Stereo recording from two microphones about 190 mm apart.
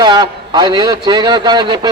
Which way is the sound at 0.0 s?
20° right (ahead or behind).